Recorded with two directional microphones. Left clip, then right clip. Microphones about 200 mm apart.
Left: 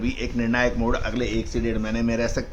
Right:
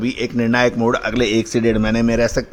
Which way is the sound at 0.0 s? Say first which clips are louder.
Right 7 dB; 35° right (ahead or behind).